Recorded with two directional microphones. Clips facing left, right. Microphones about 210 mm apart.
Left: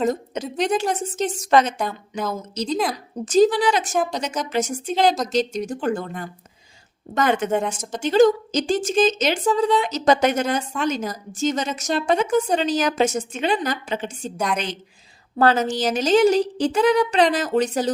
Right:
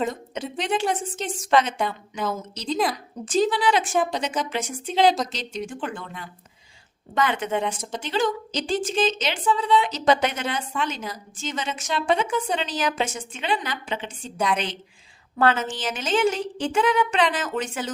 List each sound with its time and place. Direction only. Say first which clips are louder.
0.0 s speech: left 5 dB; 40° left (ahead or behind)
2.2 s a woman's voice: left 1 dB; centre (ahead or behind)
3.2 s a woman's voice: left 5 dB; 40° left (ahead or behind)
15.4 s speech: left 4 dB; 40° left (ahead or behind)